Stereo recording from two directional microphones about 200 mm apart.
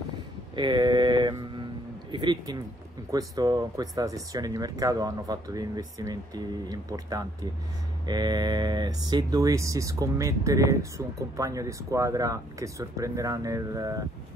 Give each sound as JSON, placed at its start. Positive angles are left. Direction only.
{"t": 0.6, "sound": "mantra", "side_deg": -20}
{"t": 2.0, "sound": "speech", "side_deg": -20}